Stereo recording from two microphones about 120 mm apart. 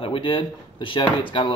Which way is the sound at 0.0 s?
45° left (ahead or behind).